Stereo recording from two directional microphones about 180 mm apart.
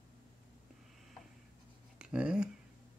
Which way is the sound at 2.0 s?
5° right (ahead or behind).